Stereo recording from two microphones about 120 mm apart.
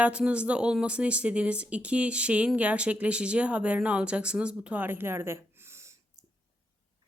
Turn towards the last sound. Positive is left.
turn(degrees=-20)  # may be behind; listen again after turning